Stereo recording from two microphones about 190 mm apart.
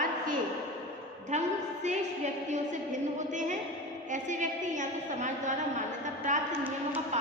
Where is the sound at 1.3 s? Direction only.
40° right (ahead or behind).